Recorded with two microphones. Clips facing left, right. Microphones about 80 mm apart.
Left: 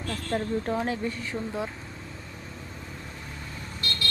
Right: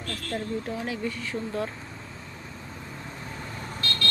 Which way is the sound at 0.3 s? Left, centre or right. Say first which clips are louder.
Left 3 dB; left.